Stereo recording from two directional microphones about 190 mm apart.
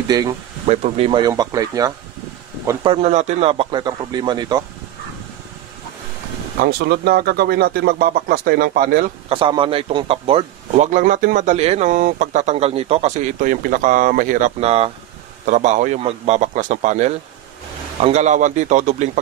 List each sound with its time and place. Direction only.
0.1 s speech: 20° right (ahead or behind)
0.7 s a man's voice: 35° right (ahead or behind)
1.2 s speech: 20° right (ahead or behind)
2.8 s speech: 30° right (ahead or behind)
6.6 s speech: 55° right (ahead or behind)
9.3 s a man's voice: 25° right (ahead or behind)